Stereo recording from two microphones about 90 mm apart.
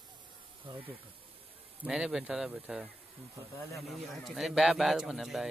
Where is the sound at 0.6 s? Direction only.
70° right (ahead or behind).